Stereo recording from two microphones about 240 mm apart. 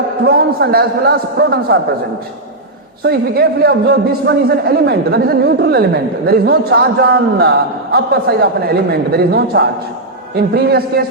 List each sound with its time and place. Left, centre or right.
0.3 s a man's voice: right
3.0 s a man's voice: right